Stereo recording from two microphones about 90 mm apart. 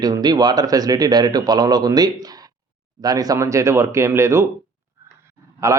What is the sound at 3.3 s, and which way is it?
Speech, 35° right (ahead or behind).